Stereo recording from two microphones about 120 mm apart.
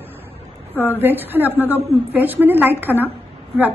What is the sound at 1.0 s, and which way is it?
A woman's voice, 15° right (ahead or behind).